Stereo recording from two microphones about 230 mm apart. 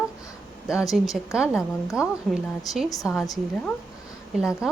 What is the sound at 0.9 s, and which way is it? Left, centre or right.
Speech, centre.